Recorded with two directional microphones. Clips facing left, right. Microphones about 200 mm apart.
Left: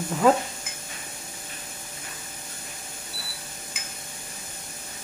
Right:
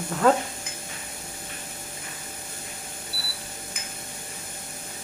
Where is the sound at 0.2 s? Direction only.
Centre (ahead or behind).